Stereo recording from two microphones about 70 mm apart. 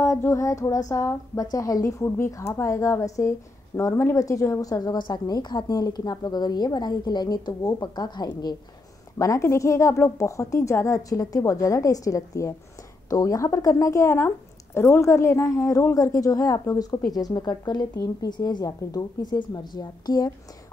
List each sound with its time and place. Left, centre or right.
0.3 s a woman's voice: left
9.2 s a woman's voice: left